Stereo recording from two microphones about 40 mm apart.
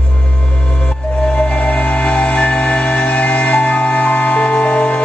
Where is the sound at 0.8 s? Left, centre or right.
Left.